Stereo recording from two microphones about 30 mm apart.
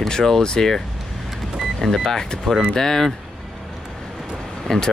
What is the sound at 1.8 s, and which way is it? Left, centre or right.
Speech, centre.